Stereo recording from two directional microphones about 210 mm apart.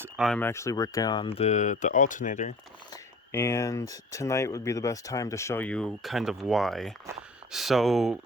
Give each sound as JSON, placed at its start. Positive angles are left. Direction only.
{"t": 0.2, "sound": "speech", "side_deg": 5}
{"t": 2.9, "sound": "speech", "side_deg": 15}